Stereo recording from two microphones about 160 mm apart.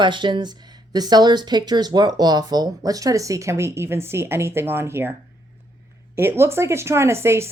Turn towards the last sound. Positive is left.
turn(degrees=-15)  # may be behind; listen again after turning